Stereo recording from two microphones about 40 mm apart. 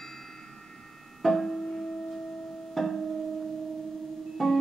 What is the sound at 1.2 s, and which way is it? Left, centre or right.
Music, centre.